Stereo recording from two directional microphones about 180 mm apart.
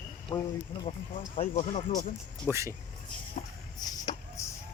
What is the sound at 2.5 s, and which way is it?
Speech, 15° right (ahead or behind).